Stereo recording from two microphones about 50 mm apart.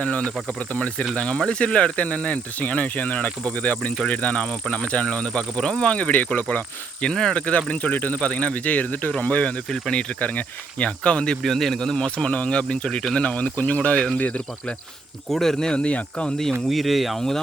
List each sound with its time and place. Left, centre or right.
0.0 s speech: left
7.0 s speech: centre
7.4 s speech: left
9.6 s speech: centre
9.9 s speech: left
11.4 s speech: centre; by 14.4 s left
15.3 s speech: centre
15.7 s speech: left
16.5 s speech: centre